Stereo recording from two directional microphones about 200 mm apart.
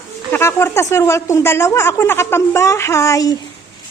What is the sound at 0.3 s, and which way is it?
A woman's voice, 10° left (ahead or behind).